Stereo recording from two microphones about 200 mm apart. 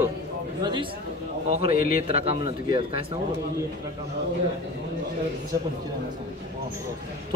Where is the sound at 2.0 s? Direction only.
30° right (ahead or behind).